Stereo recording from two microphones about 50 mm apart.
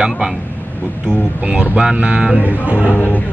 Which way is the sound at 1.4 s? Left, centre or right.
Right.